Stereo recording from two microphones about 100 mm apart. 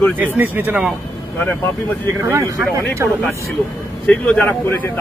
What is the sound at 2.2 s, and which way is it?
Speech, 30° right (ahead or behind).